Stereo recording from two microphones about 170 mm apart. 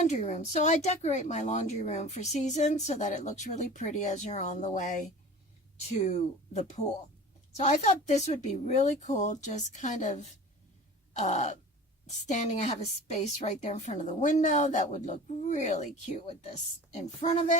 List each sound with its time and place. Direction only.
0.0 s speech: 45° left (ahead or behind)
6.0 s speech: 45° left (ahead or behind)
11.1 s groan: 45° left (ahead or behind)
12.0 s speech: 45° left (ahead or behind)
17.2 s speech: 45° left (ahead or behind)